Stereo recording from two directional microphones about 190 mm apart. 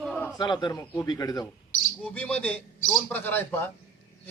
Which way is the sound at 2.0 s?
5° left (ahead or behind).